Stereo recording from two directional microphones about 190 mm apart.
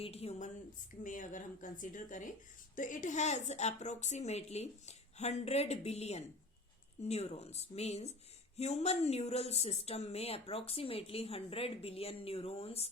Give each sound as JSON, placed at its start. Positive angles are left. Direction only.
{"t": 0.0, "sound": "a woman's voice", "side_deg": 30}